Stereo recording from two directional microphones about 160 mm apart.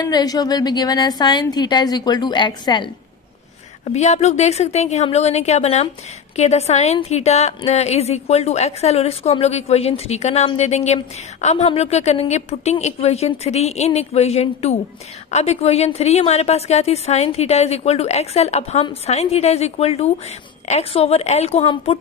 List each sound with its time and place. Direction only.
0.0 s a woman's voice: 25° left (ahead or behind)
3.8 s a woman's voice: 45° left (ahead or behind)